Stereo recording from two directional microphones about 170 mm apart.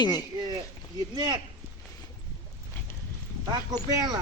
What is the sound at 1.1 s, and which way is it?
Speech, 25° right (ahead or behind).